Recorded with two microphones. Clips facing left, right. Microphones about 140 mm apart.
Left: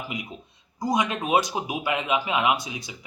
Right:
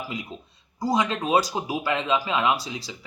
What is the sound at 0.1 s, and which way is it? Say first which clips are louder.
Speech: right 1 dB; 20° left (ahead or behind).